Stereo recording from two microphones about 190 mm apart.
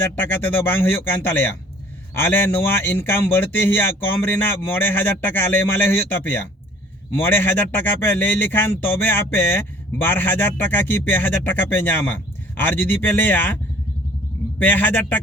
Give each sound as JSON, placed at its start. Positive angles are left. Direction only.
{"t": 0.0, "sound": "speech", "side_deg": 10}
{"t": 14.6, "sound": "speech", "side_deg": 10}